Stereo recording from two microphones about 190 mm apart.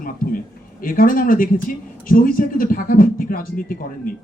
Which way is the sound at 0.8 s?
45° left (ahead or behind).